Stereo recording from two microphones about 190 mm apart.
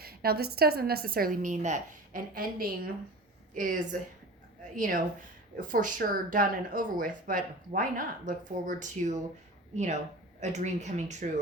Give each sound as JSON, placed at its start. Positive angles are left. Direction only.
{"t": 0.0, "sound": "a woman's voice", "side_deg": -55}